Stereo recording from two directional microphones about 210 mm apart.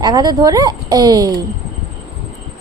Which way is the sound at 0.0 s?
20° right (ahead or behind).